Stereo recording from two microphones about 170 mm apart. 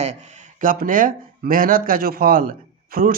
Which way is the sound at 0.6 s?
50° right (ahead or behind).